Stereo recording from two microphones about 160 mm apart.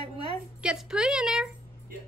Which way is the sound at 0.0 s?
35° right (ahead or behind).